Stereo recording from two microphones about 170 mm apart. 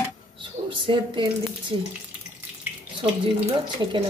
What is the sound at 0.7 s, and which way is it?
Speech, 30° right (ahead or behind).